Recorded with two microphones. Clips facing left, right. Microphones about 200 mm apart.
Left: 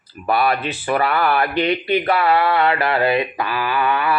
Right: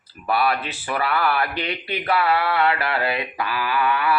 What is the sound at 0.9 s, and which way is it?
Speech, 55° left (ahead or behind).